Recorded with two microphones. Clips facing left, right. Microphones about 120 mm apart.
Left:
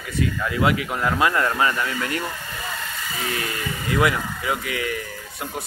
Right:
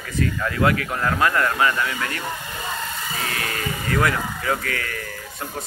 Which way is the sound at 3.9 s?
10° left (ahead or behind).